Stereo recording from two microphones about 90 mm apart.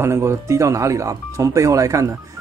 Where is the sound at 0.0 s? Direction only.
30° right (ahead or behind).